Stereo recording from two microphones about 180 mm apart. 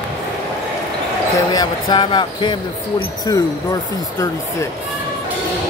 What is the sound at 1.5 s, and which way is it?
Speech, 25° left (ahead or behind).